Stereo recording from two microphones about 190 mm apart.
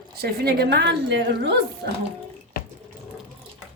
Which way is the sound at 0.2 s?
55° right (ahead or behind).